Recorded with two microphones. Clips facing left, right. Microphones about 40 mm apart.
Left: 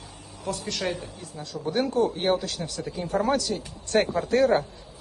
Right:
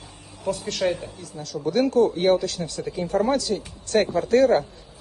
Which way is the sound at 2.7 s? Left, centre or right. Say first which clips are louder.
Right 3 dB; right.